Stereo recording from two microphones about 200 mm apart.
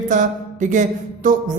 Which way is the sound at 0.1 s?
40° right (ahead or behind).